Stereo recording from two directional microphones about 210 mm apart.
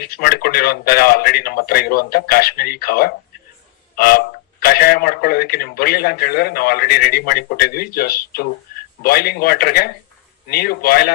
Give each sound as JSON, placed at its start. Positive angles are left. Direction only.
{"t": 0.0, "sound": "a man's voice", "side_deg": 45}
{"t": 3.9, "sound": "a sound", "side_deg": 45}
{"t": 4.6, "sound": "a man's voice", "side_deg": 45}